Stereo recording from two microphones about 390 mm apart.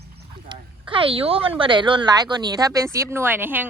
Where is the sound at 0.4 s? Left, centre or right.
Centre.